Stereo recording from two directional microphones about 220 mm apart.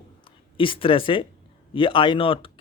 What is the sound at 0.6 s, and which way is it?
Speech, 25° left (ahead or behind).